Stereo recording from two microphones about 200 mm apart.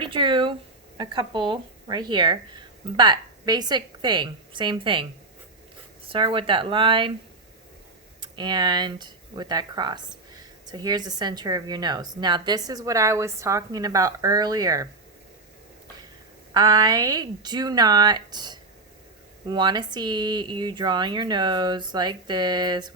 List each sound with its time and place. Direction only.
0.0 s a sound: 25° right (ahead or behind)
0.9 s a woman's voice: 25° right (ahead or behind)
6.1 s a woman's voice: 25° right (ahead or behind)
8.2 s a woman's voice: 20° right (ahead or behind)
16.6 s a woman's voice: 20° right (ahead or behind)